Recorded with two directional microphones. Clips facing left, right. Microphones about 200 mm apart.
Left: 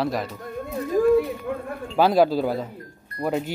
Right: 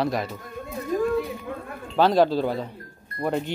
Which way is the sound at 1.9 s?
5° left (ahead or behind).